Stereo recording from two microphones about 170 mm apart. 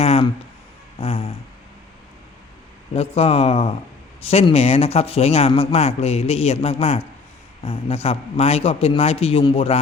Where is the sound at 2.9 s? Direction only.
35° left (ahead or behind).